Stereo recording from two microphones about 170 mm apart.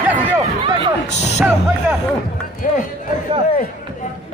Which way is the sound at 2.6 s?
50° left (ahead or behind).